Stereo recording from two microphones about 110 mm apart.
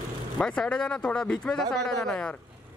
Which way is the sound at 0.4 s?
10° left (ahead or behind).